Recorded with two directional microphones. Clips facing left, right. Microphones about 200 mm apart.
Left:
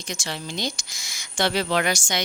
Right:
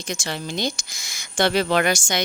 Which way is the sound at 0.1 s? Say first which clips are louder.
Right 3 dB; 55° right (ahead or behind).